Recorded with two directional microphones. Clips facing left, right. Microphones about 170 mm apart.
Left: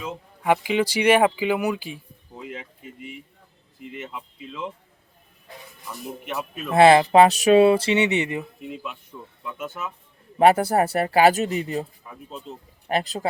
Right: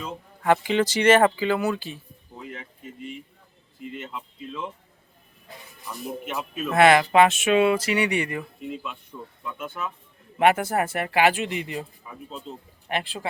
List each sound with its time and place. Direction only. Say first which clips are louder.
0.0 s speech: even; 10° left (ahead or behind)
2.4 s a sound: left 2 dB; 15° left (ahead or behind)
3.8 s speech: even; 5° left (ahead or behind)
5.9 s speech: even; centre (ahead or behind)
6.7 s speech: left 3 dB; 30° left (ahead or behind)
8.6 s speech: right 1 dB; 5° left (ahead or behind)
10.3 s speech: left 4 dB; 35° left (ahead or behind)
12.9 s speech: left 5 dB; 35° left (ahead or behind)